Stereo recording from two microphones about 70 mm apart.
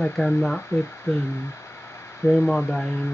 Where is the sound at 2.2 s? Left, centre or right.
Left.